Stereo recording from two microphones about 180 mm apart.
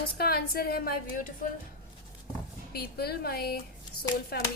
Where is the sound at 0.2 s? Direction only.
60° left (ahead or behind).